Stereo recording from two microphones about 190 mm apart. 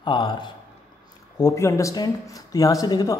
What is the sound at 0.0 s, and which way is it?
Speech, 25° left (ahead or behind).